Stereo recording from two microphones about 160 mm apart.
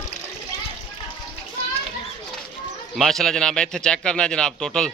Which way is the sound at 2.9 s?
Centre (ahead or behind).